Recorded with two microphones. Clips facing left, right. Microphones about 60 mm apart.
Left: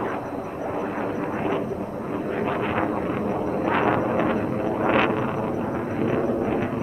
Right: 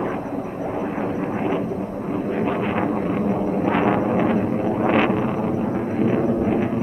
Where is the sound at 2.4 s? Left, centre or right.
Centre.